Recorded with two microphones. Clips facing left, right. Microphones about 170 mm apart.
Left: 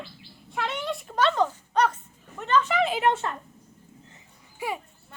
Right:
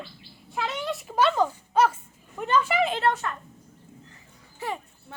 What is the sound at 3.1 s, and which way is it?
Speech, 25° left (ahead or behind).